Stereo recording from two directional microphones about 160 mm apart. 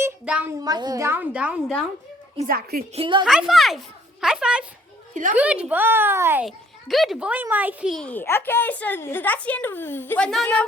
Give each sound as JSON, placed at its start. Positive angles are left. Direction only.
{"t": 0.0, "sound": "a sound", "side_deg": -5}
{"t": 0.6, "sound": "a woman's voice", "side_deg": -25}
{"t": 2.5, "sound": "a woman's voice", "side_deg": -75}
{"t": 2.9, "sound": "a woman's voice", "side_deg": -35}
{"t": 3.2, "sound": "a woman's voice", "side_deg": -5}
{"t": 6.4, "sound": "a child's voice", "side_deg": 0}
{"t": 7.9, "sound": "a woman's voice", "side_deg": 10}